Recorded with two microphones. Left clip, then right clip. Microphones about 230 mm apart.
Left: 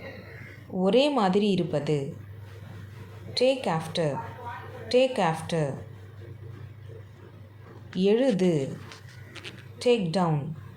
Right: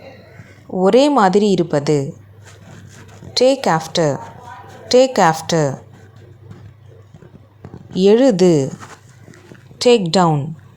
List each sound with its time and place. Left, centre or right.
0.8 s a woman's voice: right
3.3 s a woman's voice: right
7.9 s a woman's voice: right
9.7 s a woman's voice: right